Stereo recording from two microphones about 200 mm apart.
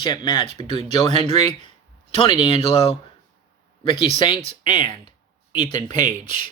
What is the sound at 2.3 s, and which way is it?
Speech, 30° left (ahead or behind).